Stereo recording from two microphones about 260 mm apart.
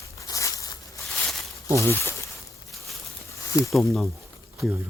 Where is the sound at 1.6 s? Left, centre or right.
Centre.